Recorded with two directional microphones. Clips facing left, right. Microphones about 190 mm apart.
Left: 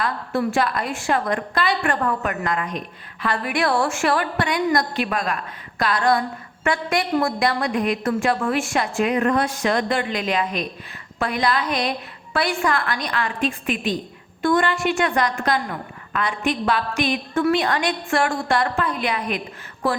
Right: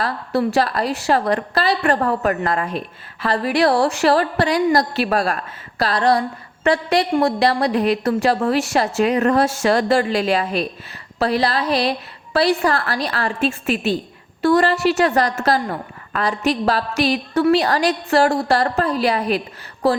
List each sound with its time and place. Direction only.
0.0 s a woman's voice: 35° right (ahead or behind)